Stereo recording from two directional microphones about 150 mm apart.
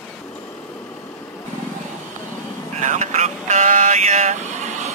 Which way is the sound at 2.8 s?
50° right (ahead or behind).